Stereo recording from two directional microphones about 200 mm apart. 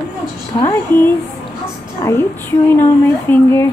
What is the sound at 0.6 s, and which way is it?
A woman's voice, 15° left (ahead or behind).